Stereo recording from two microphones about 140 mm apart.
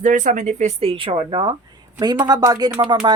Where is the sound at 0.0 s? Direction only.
65° right (ahead or behind).